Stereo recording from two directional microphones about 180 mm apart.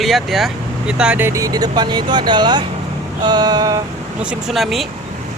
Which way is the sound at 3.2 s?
20° right (ahead or behind).